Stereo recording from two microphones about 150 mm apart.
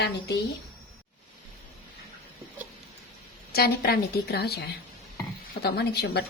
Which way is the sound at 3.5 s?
90° left.